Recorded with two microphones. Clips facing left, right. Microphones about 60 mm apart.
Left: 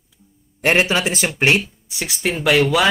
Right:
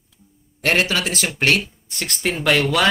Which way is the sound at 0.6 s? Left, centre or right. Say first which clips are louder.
Left 3 dB; centre.